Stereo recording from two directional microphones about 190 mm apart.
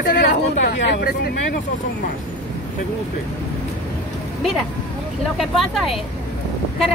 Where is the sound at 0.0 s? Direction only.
55° left (ahead or behind).